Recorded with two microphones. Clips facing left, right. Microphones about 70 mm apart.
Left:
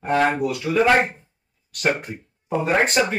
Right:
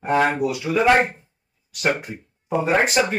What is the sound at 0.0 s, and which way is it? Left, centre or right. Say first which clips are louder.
Speech: even; centre.